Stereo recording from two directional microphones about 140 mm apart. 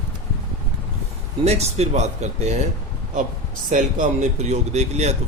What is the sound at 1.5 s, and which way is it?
Speech, 50° right (ahead or behind).